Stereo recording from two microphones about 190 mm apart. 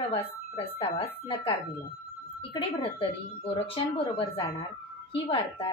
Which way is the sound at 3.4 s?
30° left (ahead or behind).